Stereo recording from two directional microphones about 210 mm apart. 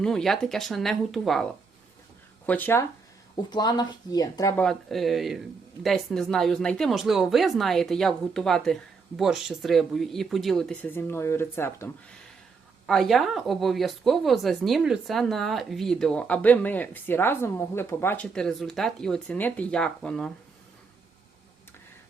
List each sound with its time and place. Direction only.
0.0 s speech: centre (ahead or behind)
4.6 s speech: centre (ahead or behind)
12.8 s speech: centre (ahead or behind)